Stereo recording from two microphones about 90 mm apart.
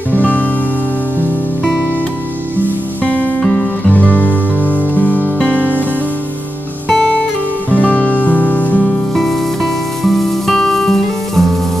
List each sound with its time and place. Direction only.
0.1 s music: 15° left (ahead or behind)
3.1 s music: 15° left (ahead or behind)
7.7 s music: 15° left (ahead or behind)
9.1 s music: centre (ahead or behind)